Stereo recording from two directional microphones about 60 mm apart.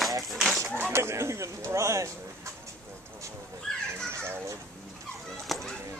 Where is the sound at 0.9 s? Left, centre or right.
Right.